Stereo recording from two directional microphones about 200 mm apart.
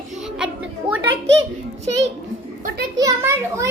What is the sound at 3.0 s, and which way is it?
Children playing, 15° right (ahead or behind).